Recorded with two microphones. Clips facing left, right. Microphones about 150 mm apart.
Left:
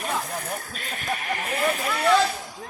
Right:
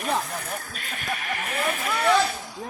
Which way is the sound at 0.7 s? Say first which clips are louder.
Left 2 dB; 40° left (ahead or behind).